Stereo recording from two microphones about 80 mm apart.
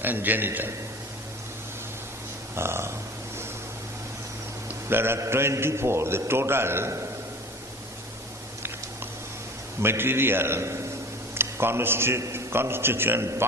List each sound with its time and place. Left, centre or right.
0.0 s a man's voice: right
2.6 s a man's voice: right
4.9 s a man's voice: right
9.8 s a man's voice: right